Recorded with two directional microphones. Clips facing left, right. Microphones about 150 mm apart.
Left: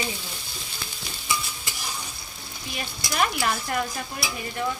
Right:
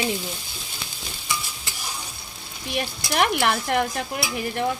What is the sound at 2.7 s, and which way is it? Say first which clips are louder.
Stir: right 6 dB; 65° right (ahead or behind).